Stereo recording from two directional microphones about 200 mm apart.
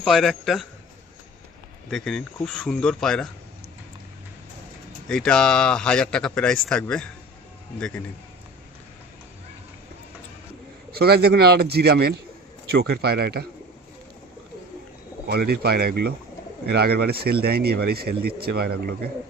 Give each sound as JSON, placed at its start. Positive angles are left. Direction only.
{"t": 0.0, "sound": "speech", "side_deg": 0}
{"t": 1.9, "sound": "speech", "side_deg": 5}
{"t": 5.0, "sound": "speech", "side_deg": 5}
{"t": 10.9, "sound": "speech", "side_deg": -50}
{"t": 15.3, "sound": "speech", "side_deg": -55}